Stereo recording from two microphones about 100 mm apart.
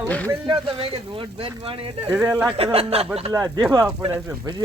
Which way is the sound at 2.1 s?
10° right (ahead or behind).